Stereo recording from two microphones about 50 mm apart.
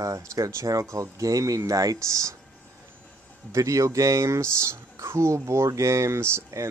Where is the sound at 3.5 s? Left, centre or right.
Right.